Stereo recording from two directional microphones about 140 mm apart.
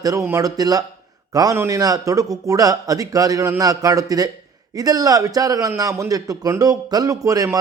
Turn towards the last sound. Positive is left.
turn(degrees=-25)  # may be behind; listen again after turning